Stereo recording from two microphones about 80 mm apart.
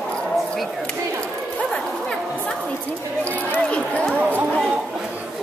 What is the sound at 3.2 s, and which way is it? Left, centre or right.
Speech, centre.